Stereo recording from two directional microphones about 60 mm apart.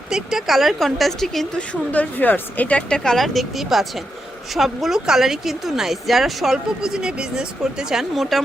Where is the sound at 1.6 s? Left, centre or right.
Left.